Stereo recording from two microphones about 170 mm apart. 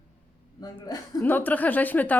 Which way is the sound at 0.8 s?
10° left (ahead or behind).